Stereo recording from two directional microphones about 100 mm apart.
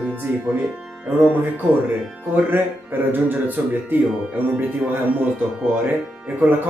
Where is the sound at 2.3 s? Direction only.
20° right (ahead or behind).